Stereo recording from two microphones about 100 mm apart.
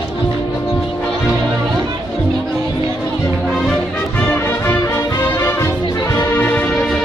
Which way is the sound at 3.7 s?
10° left (ahead or behind).